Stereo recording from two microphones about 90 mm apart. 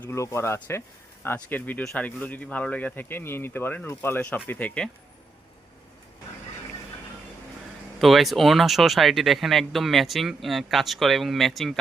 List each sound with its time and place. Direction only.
0.0 s speech: 30° left (ahead or behind); by 4.9 s 15° left (ahead or behind)
8.0 s speech: centre (ahead or behind)